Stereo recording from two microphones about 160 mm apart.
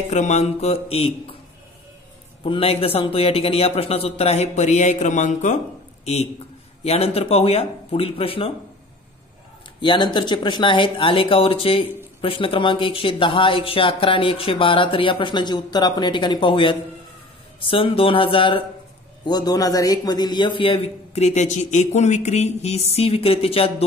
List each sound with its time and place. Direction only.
0.1 s speech: 45° left (ahead or behind)
2.4 s speech: 35° left (ahead or behind); by 5.6 s 50° left (ahead or behind)
6.8 s speech: 40° left (ahead or behind)
9.8 s speech: 30° left (ahead or behind)